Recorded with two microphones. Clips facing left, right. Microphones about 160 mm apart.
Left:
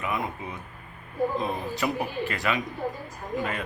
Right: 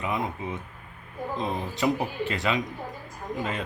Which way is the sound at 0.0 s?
20° right (ahead or behind).